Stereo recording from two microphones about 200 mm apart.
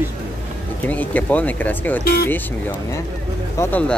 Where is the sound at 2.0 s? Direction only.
50° left (ahead or behind).